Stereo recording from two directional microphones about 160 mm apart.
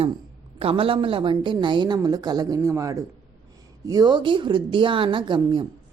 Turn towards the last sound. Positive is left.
turn(degrees=-30)  # may be behind; listen again after turning